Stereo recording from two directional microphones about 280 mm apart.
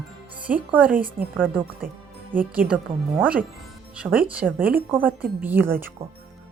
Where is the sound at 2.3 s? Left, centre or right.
Centre.